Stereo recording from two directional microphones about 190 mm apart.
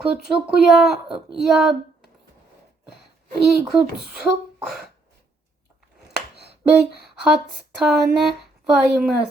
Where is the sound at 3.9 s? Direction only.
5° right (ahead or behind).